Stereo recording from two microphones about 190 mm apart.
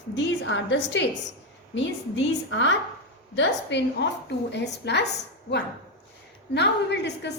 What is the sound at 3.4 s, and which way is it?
A woman's voice, 65° left (ahead or behind).